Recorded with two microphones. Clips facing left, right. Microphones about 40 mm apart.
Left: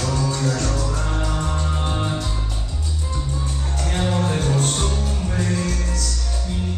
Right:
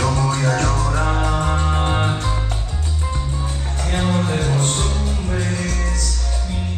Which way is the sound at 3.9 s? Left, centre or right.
Centre.